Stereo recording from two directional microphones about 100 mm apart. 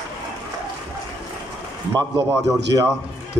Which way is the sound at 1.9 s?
35° right (ahead or behind).